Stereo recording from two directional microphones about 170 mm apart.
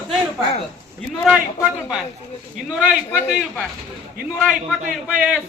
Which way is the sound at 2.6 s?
5° right (ahead or behind).